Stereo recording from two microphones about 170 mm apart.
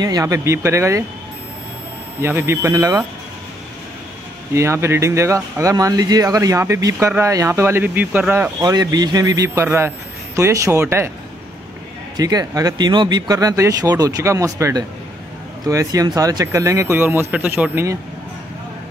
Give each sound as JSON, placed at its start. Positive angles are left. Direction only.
{"t": 0.0, "sound": "speech", "side_deg": -20}
{"t": 2.2, "sound": "speech", "side_deg": -15}
{"t": 4.6, "sound": "speech", "side_deg": -15}
{"t": 12.2, "sound": "speech", "side_deg": -20}